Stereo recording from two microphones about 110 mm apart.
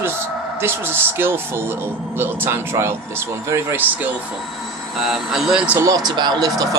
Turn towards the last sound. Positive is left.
turn(degrees=-35)  # may be behind; listen again after turning